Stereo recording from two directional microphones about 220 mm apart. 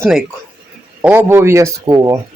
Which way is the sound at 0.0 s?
Centre (ahead or behind).